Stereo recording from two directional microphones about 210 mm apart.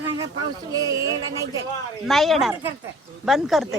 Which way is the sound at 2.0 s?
Centre (ahead or behind).